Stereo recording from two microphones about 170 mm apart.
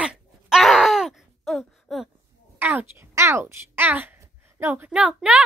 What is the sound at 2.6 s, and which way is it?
A child's voice, 10° right (ahead or behind).